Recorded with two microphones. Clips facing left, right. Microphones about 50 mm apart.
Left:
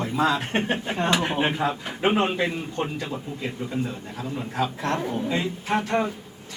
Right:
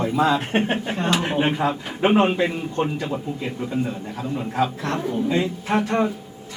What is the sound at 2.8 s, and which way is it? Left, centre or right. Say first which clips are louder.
Speech: right 6 dB; centre.